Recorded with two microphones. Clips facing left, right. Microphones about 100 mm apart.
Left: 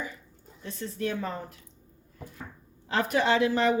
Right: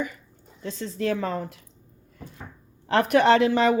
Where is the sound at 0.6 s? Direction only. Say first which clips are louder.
Right 4 dB; 90° right.